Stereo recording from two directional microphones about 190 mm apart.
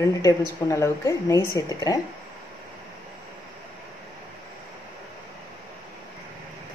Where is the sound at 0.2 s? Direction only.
15° left (ahead or behind).